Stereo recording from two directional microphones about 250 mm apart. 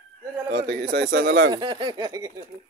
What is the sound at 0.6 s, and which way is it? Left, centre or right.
Speech, right.